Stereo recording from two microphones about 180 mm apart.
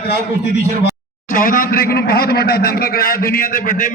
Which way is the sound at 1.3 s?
50° left (ahead or behind).